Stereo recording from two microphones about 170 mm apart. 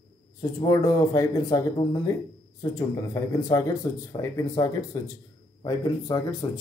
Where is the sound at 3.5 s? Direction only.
20° left (ahead or behind).